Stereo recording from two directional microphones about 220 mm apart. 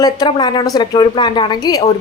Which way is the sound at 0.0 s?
20° left (ahead or behind).